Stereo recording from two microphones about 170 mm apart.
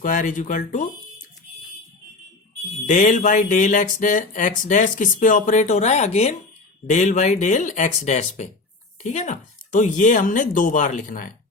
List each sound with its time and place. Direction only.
0.0 s speech: 50° left (ahead or behind)
2.8 s speech: 50° left (ahead or behind)